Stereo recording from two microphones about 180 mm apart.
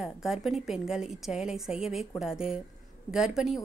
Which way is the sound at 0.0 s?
Centre (ahead or behind).